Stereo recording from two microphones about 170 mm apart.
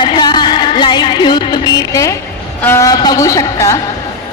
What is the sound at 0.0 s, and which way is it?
Music, 25° left (ahead or behind).